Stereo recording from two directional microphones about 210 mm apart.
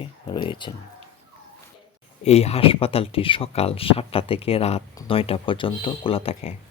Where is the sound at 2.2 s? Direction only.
30° left (ahead or behind).